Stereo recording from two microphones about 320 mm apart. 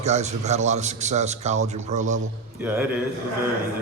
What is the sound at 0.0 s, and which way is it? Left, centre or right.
A man's voice, right.